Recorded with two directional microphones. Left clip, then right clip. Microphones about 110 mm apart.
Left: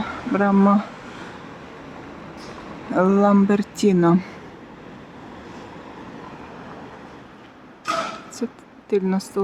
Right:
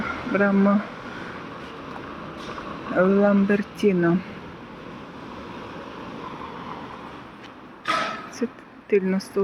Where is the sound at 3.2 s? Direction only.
35° left (ahead or behind).